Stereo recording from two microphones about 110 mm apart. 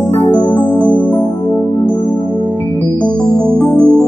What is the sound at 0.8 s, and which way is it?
Music, 15° left (ahead or behind).